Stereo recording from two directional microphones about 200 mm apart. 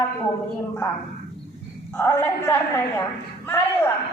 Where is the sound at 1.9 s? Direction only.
10° left (ahead or behind).